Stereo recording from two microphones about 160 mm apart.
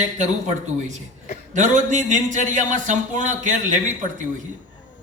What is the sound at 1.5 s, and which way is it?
A man's voice, 50° right (ahead or behind).